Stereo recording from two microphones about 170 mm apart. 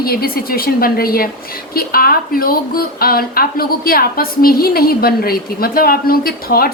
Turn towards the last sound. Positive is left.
turn(degrees=60)  # may be behind; listen again after turning